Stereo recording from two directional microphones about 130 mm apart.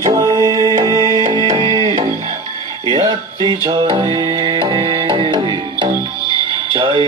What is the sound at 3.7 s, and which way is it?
Music, 30° right (ahead or behind).